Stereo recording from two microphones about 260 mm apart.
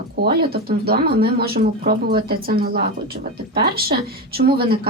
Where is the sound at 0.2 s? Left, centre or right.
Right.